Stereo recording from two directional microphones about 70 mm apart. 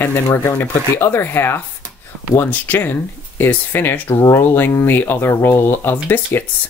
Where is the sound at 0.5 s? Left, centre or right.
Left.